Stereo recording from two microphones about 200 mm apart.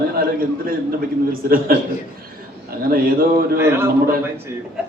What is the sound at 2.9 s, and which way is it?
Speech, 45° right (ahead or behind).